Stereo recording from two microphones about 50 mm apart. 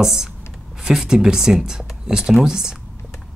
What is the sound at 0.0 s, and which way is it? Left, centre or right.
Speech, centre.